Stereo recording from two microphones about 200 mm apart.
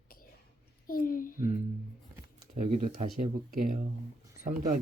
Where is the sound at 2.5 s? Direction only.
40° right (ahead or behind).